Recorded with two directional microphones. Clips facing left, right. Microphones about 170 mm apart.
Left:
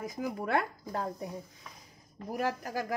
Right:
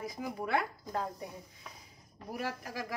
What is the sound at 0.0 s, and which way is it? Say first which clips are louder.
Speech: left 3 dB; 45° left (ahead or behind).